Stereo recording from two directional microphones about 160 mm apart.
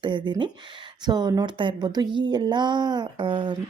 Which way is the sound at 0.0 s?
30° right (ahead or behind).